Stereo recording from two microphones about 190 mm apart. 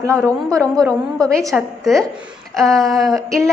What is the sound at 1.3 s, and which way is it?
Speech, centre (ahead or behind).